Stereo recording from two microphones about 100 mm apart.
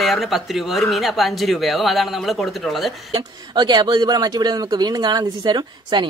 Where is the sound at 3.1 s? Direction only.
50° right (ahead or behind).